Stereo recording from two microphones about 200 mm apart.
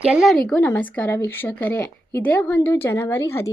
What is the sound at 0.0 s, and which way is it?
A woman's voice, 5° right (ahead or behind).